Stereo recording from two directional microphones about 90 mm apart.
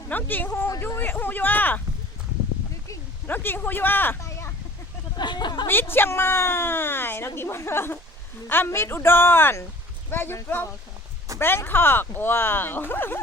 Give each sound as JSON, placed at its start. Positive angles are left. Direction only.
{"t": 0.1, "sound": "speech", "side_deg": 20}
{"t": 0.8, "sound": "a sound", "side_deg": 25}
{"t": 3.2, "sound": "a woman's voice", "side_deg": 20}
{"t": 4.2, "sound": "a sound", "side_deg": 35}
{"t": 5.1, "sound": "speech", "side_deg": 55}
{"t": 5.6, "sound": "a woman's voice", "side_deg": 25}